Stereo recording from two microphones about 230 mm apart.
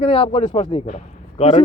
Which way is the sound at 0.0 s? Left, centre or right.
Left.